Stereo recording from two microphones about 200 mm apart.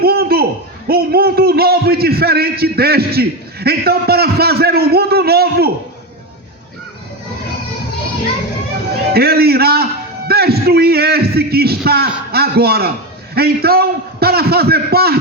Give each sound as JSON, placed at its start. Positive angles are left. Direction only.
{"t": 0.0, "sound": "a sound", "side_deg": -50}
{"t": 0.9, "sound": "a man's voice", "side_deg": -50}
{"t": 9.1, "sound": "a man's voice", "side_deg": -50}